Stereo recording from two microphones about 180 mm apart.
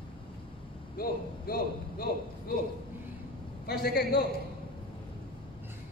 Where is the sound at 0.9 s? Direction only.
55° left (ahead or behind).